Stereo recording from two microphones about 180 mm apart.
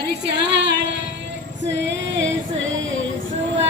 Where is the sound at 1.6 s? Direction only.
85° right.